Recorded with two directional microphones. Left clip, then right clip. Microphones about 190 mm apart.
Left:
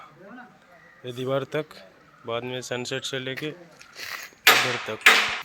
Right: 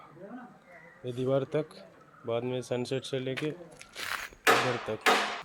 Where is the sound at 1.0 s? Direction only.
Centre (ahead or behind).